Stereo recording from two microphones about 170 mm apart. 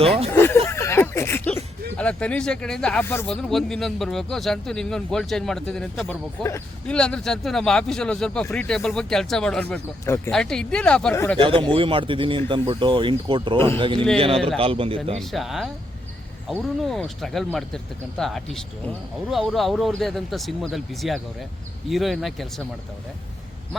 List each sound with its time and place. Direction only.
0.0 s a man's voice: 35° right (ahead or behind)
0.3 s a sound: 15° left (ahead or behind)
2.0 s speech: 5° left (ahead or behind)
3.2 s speech: centre (ahead or behind)
11.1 s speech: 15° left (ahead or behind)
11.3 s a man's voice: 30° right (ahead or behind)
15.2 s speech: centre (ahead or behind)
16.8 s speech: centre (ahead or behind)